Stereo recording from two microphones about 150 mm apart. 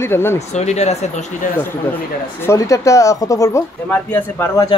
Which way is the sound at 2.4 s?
20° left (ahead or behind).